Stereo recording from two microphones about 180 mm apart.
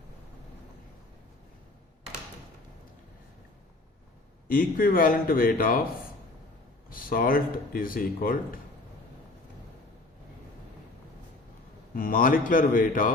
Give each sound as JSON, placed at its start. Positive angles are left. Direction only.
{"t": 4.4, "sound": "speech", "side_deg": 55}
{"t": 6.9, "sound": "speech", "side_deg": 50}
{"t": 11.9, "sound": "speech", "side_deg": 50}